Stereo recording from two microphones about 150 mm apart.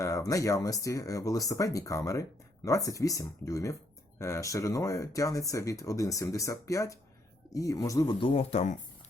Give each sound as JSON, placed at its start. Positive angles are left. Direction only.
{"t": 0.0, "sound": "speech", "side_deg": 20}
{"t": 8.2, "sound": "speech", "side_deg": 40}